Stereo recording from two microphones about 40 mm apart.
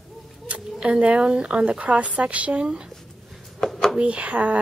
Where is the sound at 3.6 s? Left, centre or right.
Centre.